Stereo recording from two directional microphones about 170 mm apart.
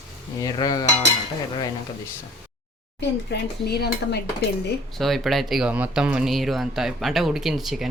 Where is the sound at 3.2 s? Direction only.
75° left (ahead or behind).